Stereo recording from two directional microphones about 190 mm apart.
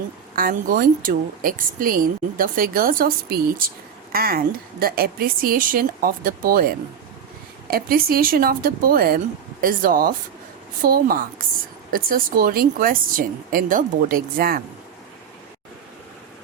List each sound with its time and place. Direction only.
0.3 s speech: 50° right (ahead or behind)